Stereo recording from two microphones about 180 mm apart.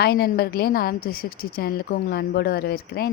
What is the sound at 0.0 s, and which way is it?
A woman's voice, 60° left (ahead or behind).